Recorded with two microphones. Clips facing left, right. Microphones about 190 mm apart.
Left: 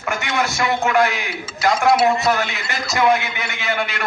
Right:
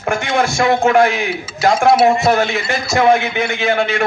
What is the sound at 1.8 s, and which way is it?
Speech, 25° right (ahead or behind).